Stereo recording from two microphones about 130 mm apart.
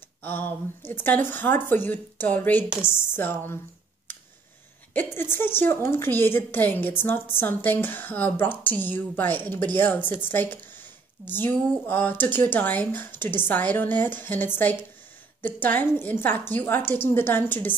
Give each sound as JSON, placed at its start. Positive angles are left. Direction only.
{"t": 0.2, "sound": "a woman's voice", "side_deg": 15}
{"t": 4.9, "sound": "a woman's voice", "side_deg": 15}